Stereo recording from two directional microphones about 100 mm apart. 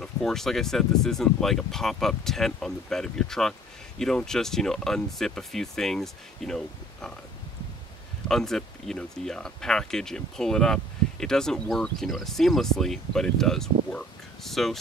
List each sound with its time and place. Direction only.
0.0 s speech: 5° left (ahead or behind)
8.3 s speech: 5° left (ahead or behind)